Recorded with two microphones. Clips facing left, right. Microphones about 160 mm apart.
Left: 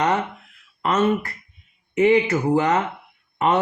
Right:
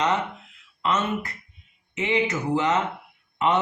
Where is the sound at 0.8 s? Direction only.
55° left (ahead or behind).